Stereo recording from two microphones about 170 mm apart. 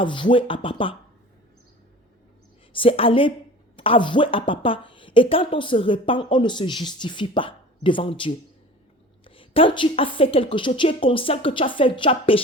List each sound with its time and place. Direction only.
0.0 s a woman's voice: 30° left (ahead or behind)
2.7 s a woman's voice: 30° left (ahead or behind)